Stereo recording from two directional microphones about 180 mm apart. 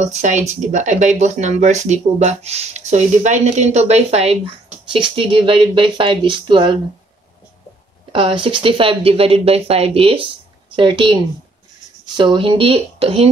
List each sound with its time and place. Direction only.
0.0 s speech: 40° right (ahead or behind)
8.1 s speech: 30° right (ahead or behind)
12.2 s speech: 30° right (ahead or behind)